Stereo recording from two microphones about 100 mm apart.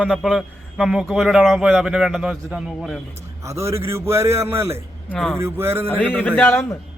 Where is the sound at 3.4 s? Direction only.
30° right (ahead or behind).